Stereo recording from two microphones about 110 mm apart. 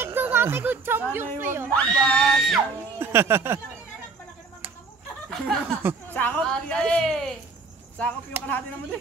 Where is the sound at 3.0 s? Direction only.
20° right (ahead or behind).